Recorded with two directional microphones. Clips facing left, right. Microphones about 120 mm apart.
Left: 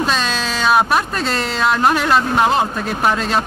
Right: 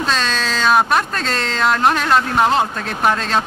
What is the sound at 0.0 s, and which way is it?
Speech, 10° left (ahead or behind).